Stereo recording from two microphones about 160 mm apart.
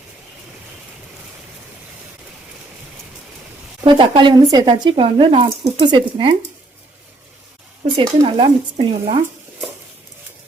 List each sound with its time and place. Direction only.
3.8 s speech: 30° right (ahead or behind)
8.0 s speech: 30° right (ahead or behind)